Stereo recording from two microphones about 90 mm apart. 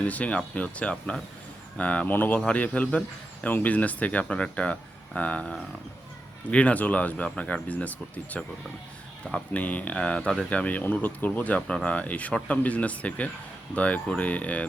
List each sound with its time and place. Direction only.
0.0 s speech: 15° left (ahead or behind)